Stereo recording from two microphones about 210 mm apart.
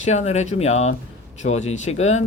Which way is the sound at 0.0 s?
30° left (ahead or behind).